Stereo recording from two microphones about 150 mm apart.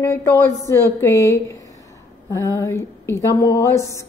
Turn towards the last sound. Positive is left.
turn(degrees=20)  # may be behind; listen again after turning